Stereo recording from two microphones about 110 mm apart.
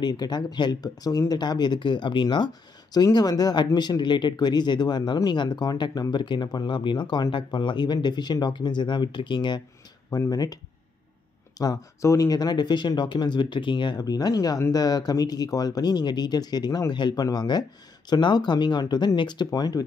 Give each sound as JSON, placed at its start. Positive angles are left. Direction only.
{"t": 0.0, "sound": "speech", "side_deg": 40}
{"t": 10.1, "sound": "speech", "side_deg": 35}